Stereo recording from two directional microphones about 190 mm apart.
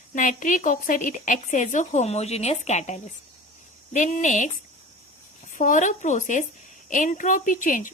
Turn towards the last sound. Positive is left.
turn(degrees=45)  # may be behind; listen again after turning